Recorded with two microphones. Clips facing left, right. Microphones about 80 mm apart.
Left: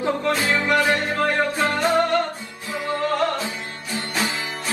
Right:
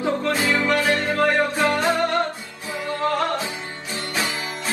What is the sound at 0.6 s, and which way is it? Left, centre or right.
Music, left.